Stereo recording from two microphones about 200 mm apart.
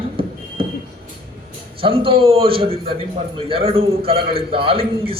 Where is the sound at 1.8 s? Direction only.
25° right (ahead or behind).